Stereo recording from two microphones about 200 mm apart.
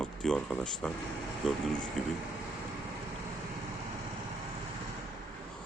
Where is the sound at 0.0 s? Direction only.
5° left (ahead or behind).